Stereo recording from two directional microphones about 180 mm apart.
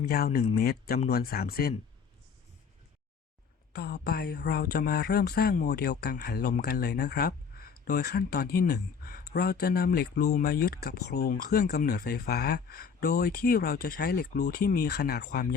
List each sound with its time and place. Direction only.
0.0 s speech: 60° left (ahead or behind)
3.7 s speech: 60° left (ahead or behind)